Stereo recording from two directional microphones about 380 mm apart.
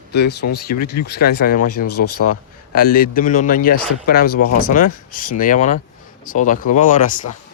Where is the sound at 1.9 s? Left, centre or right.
Left.